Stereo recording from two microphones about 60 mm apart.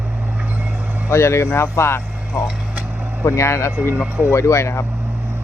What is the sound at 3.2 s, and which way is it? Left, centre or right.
Speech, left.